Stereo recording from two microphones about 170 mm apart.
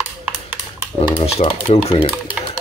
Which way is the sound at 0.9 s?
35° left (ahead or behind).